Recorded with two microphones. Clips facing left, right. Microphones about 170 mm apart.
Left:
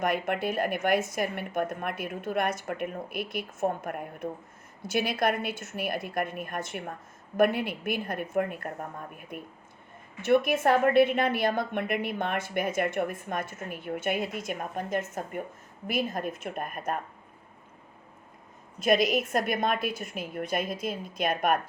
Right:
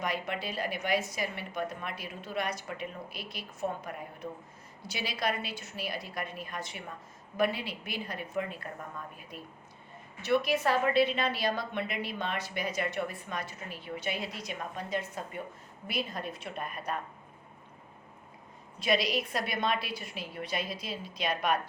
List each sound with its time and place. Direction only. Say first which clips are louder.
0.0 s a woman's voice: left 6 dB; 50° left (ahead or behind)
18.8 s a woman's voice: left 5 dB; 50° left (ahead or behind)